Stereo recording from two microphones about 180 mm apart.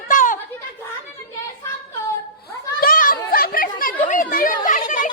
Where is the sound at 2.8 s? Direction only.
50° left (ahead or behind).